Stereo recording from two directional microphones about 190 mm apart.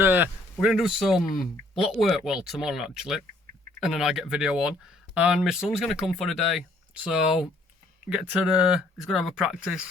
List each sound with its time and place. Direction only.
0.0 s a man's voice: 10° right (ahead or behind)